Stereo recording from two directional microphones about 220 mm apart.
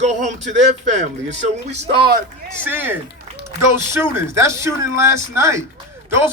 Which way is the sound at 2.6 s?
10° right (ahead or behind).